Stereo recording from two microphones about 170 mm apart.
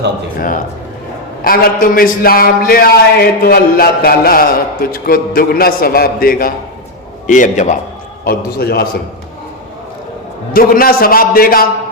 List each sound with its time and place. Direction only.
1.5 s a man's voice: 60° left (ahead or behind)
8.2 s a man's voice: 65° left (ahead or behind)
10.5 s a man's voice: 60° left (ahead or behind)